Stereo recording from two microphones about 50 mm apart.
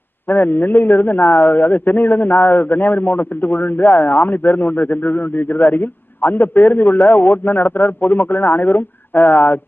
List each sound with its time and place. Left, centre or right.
0.3 s a man's voice: left